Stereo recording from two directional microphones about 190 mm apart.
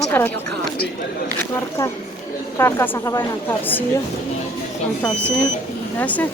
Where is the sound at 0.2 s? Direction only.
10° left (ahead or behind).